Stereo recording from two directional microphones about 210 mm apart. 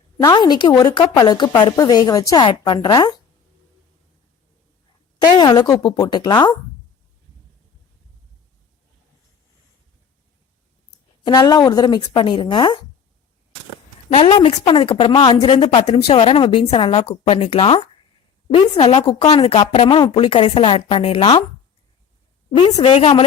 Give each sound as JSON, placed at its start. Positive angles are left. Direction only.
{"t": 0.2, "sound": "a woman's voice", "side_deg": 15}
{"t": 5.4, "sound": "a woman's voice", "side_deg": 20}
{"t": 11.3, "sound": "a woman's voice", "side_deg": 20}
{"t": 14.1, "sound": "a woman's voice", "side_deg": 30}
{"t": 22.5, "sound": "a woman's voice", "side_deg": 30}